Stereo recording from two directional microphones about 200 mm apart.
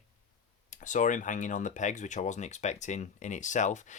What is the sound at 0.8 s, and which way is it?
Speech, 40° left (ahead or behind).